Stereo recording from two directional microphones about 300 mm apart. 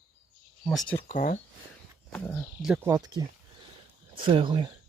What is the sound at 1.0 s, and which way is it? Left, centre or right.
Speech, left.